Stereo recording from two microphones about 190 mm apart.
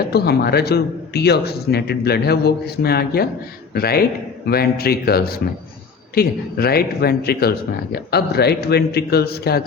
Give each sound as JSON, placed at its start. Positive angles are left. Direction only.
{"t": 0.1, "sound": "a man's voice", "side_deg": 55}